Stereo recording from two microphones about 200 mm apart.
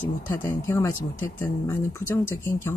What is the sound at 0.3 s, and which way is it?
Speech, 15° left (ahead or behind).